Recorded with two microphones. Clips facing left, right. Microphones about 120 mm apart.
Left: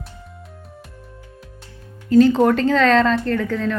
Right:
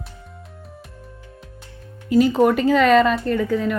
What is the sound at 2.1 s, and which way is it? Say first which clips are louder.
Speech: left 2 dB; 10° right (ahead or behind).